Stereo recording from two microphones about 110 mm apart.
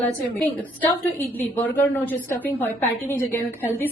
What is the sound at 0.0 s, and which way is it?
A woman's voice, 15° left (ahead or behind).